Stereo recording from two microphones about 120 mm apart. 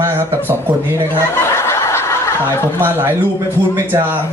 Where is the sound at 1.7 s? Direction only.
20° left (ahead or behind).